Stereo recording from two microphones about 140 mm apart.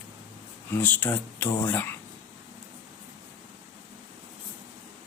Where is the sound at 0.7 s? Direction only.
15° left (ahead or behind).